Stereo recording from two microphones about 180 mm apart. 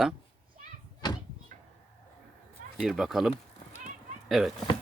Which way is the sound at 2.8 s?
Centre (ahead or behind).